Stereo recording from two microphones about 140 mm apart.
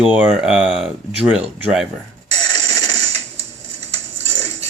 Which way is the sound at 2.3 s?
25° left (ahead or behind).